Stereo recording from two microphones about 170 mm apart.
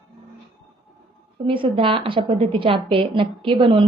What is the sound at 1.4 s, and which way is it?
A woman's voice, 30° right (ahead or behind).